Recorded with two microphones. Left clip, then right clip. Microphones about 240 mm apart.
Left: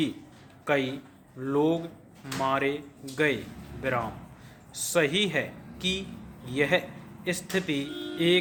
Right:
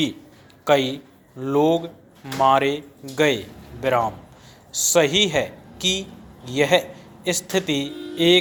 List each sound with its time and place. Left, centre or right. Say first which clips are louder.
0.6 s a man's voice: right 8 dB; centre